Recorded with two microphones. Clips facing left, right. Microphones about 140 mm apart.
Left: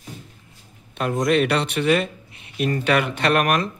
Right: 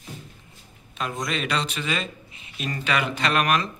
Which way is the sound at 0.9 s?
55° left (ahead or behind).